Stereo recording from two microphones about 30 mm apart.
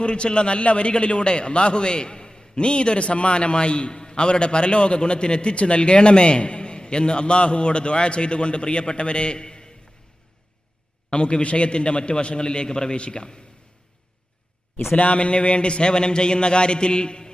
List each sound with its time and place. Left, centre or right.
0.0 s a man's voice: left
11.1 s a man's voice: left
14.9 s a man's voice: left